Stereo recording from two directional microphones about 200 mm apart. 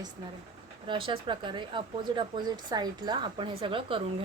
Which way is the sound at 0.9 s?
25° right (ahead or behind).